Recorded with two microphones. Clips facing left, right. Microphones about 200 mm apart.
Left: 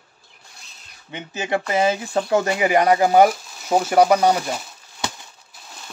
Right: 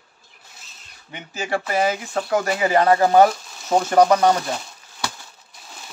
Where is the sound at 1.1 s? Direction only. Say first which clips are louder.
Left 2 dB; 20° left (ahead or behind).